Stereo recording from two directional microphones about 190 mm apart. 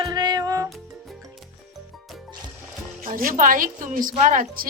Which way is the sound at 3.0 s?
45° right (ahead or behind).